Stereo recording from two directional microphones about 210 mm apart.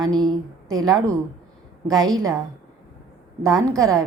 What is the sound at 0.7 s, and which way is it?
A woman's voice, 15° right (ahead or behind).